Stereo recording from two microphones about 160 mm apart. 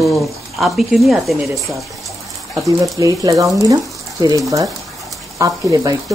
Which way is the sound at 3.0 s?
20° right (ahead or behind).